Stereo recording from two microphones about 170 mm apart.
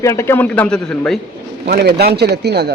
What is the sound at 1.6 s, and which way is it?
Speech, 75° right (ahead or behind).